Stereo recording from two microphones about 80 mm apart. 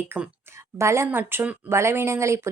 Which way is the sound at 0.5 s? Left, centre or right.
Right.